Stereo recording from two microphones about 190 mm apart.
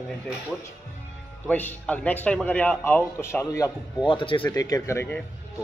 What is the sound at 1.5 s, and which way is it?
Speech, 10° left (ahead or behind).